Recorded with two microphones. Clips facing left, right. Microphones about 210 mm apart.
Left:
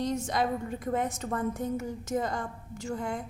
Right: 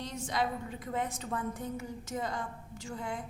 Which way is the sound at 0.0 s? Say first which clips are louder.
Left 5 dB; 45° left (ahead or behind).